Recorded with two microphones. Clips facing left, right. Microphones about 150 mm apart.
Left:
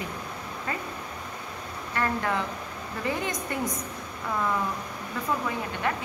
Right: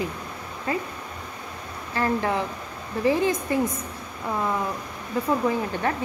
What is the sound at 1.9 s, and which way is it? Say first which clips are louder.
A woman's voice: right 4 dB; 30° right (ahead or behind).